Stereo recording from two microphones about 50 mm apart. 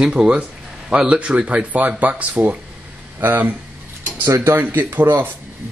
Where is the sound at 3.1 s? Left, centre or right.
Right.